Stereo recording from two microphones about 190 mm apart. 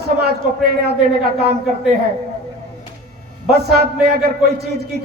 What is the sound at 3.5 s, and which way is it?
A man's voice, 55° right (ahead or behind).